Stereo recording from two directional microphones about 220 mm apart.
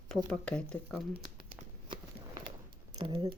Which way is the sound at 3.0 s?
20° right (ahead or behind).